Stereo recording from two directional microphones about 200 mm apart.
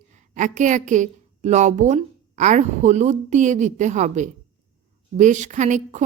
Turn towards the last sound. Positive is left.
turn(degrees=-35)  # may be behind; listen again after turning